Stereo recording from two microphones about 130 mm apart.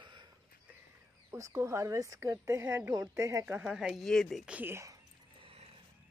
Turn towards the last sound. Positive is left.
turn(degrees=-45)  # may be behind; listen again after turning